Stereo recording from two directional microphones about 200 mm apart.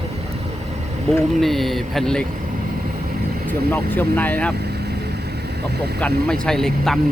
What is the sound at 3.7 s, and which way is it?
Speech, 10° left (ahead or behind).